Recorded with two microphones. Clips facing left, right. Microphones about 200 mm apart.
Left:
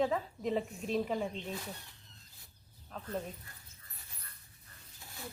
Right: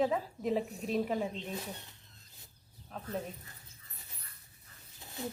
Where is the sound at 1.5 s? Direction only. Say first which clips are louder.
Right 1 dB; 20° right (ahead or behind).